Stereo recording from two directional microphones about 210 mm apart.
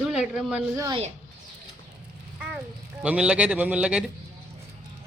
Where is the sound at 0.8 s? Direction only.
20° right (ahead or behind).